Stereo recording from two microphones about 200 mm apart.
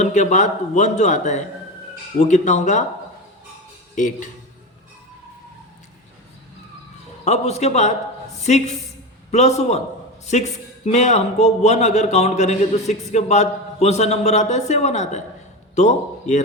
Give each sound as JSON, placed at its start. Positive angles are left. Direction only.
{"t": 0.0, "sound": "a man's voice", "side_deg": 35}
{"t": 3.9, "sound": "a man's voice", "side_deg": 40}
{"t": 7.3, "sound": "a man's voice", "side_deg": 35}